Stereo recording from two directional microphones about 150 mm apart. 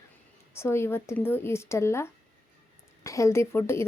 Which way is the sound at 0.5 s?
15° left (ahead or behind).